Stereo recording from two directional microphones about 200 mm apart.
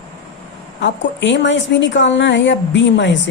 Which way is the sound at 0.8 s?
65° left (ahead or behind).